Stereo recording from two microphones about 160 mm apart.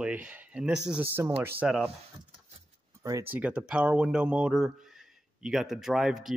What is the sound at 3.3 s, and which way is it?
A man's voice, 5° right (ahead or behind).